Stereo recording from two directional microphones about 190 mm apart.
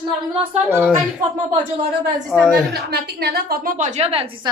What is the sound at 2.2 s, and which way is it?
Speech, centre (ahead or behind).